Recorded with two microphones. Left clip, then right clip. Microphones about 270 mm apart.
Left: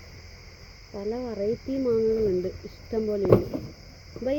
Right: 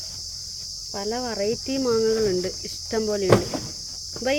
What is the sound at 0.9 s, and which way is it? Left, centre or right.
Cricket, right.